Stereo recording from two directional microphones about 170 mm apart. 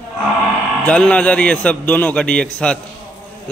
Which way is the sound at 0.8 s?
5° left (ahead or behind).